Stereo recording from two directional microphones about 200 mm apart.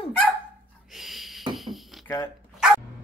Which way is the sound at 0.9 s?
Centre (ahead or behind).